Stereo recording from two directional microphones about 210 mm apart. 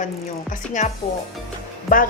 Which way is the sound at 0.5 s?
35° left (ahead or behind).